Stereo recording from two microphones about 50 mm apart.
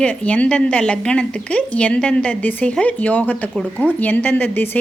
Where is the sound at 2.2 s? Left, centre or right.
Left.